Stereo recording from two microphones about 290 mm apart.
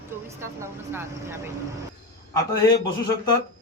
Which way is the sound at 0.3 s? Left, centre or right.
Centre.